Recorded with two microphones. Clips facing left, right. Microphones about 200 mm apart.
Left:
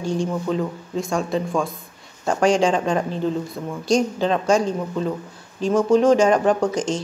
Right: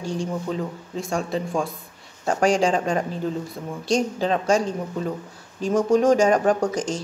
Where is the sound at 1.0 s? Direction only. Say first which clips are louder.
Left 2 dB; 35° right (ahead or behind).